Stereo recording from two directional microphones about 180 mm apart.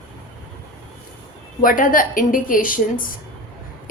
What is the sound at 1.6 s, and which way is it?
A woman's voice, 50° left (ahead or behind).